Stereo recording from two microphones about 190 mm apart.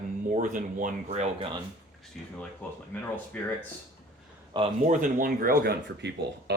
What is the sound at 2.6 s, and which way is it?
Speech, 10° left (ahead or behind).